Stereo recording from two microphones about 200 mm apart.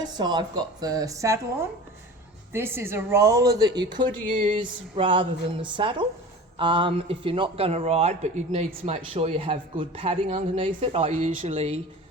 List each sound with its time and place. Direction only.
0.0 s speech: 20° right (ahead or behind)